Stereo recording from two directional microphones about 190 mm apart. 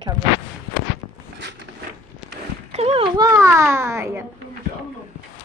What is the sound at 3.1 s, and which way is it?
A woman's voice, 20° right (ahead or behind).